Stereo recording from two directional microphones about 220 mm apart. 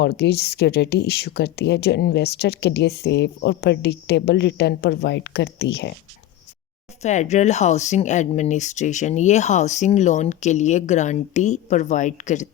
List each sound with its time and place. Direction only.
0.0 s speech: 50° left (ahead or behind)
7.0 s speech: 30° left (ahead or behind)